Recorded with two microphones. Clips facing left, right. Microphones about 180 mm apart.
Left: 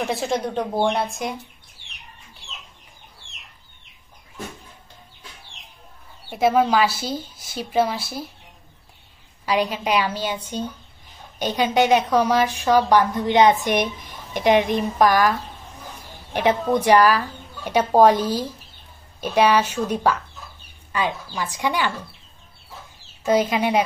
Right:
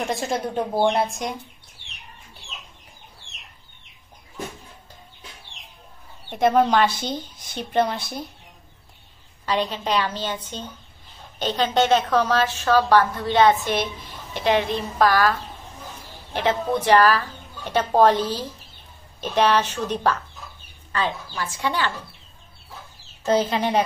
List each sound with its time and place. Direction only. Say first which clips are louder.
0.0 s a woman's voice: left 2 dB; centre (ahead or behind)
6.3 s a woman's voice: even; 5° left (ahead or behind)
9.5 s a woman's voice: left 2 dB; 10° left (ahead or behind)
23.2 s a woman's voice: left 1 dB; 10° left (ahead or behind)